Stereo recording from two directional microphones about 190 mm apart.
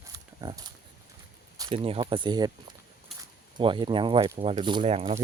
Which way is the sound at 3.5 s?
25° right (ahead or behind).